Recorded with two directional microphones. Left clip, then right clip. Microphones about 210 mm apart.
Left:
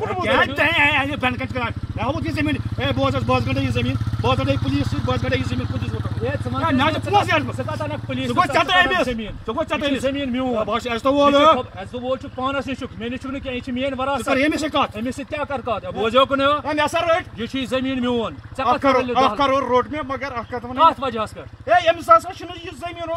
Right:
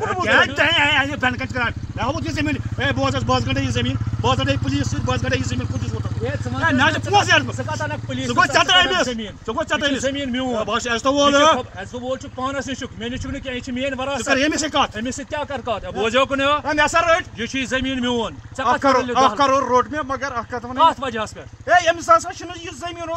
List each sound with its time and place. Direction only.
0.0 s speech: 5° right (ahead or behind)
10.3 s speech: 15° right (ahead or behind)
10.6 s speech: 5° right (ahead or behind)
12.1 s speech: 15° right (ahead or behind)
14.1 s speech: 5° right (ahead or behind)
16.6 s speech: 5° left (ahead or behind)
17.6 s speech: 5° right (ahead or behind)
19.1 s speech: 5° left (ahead or behind)
20.7 s speech: 5° right (ahead or behind)